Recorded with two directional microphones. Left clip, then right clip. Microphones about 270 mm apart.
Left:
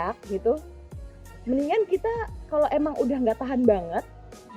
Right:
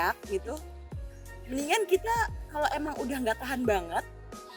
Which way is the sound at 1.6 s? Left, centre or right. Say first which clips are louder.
Left 1 dB; right.